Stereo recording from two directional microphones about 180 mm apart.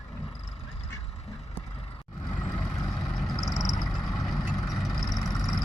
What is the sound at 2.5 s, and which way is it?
Vehicle, 5° left (ahead or behind).